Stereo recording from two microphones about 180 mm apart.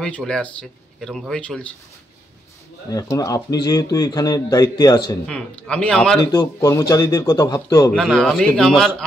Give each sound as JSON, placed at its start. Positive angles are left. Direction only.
{"t": 0.0, "sound": "speech", "side_deg": 5}
{"t": 2.9, "sound": "speech", "side_deg": 20}
{"t": 5.2, "sound": "speech", "side_deg": 5}
{"t": 6.2, "sound": "speech", "side_deg": 20}
{"t": 7.9, "sound": "speech", "side_deg": 0}